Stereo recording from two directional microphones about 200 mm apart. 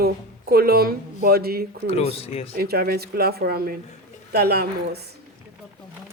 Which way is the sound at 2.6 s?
50° right (ahead or behind).